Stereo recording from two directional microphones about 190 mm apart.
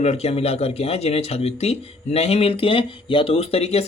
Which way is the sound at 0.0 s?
35° left (ahead or behind).